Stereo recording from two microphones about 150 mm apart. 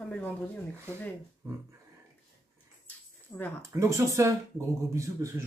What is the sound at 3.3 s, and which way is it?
Speech, 25° left (ahead or behind).